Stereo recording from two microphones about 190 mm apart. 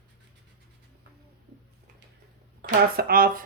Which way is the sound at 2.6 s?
50° right (ahead or behind).